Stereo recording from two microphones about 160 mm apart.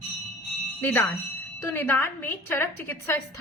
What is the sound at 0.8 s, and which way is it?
A woman's voice, 10° left (ahead or behind).